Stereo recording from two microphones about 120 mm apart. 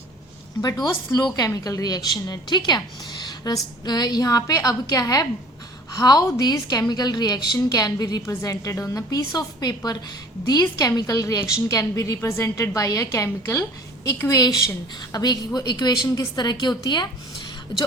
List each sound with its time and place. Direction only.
1.1 s a woman's voice: 30° left (ahead or behind)